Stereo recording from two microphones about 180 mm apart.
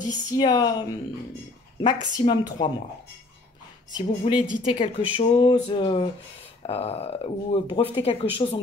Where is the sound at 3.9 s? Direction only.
25° left (ahead or behind).